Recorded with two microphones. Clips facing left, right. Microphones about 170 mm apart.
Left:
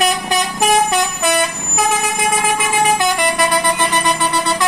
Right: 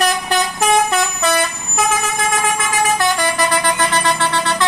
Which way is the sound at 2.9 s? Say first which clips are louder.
Left 1 dB; 20° left (ahead or behind).